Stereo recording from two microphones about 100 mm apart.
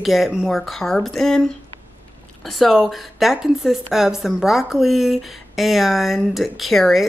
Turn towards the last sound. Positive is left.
turn(degrees=0)  # may be behind; listen again after turning